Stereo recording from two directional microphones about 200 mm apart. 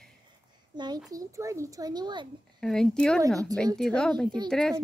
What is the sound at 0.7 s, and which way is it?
A child's voice, 20° right (ahead or behind).